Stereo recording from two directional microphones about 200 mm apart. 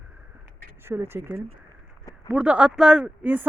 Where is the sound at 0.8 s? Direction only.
10° right (ahead or behind).